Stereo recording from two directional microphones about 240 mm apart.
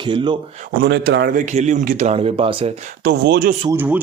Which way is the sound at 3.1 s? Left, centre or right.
Right.